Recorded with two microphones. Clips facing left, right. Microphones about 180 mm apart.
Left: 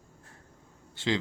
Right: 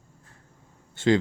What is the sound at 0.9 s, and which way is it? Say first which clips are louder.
Speech: right 8 dB; 50° right (ahead or behind).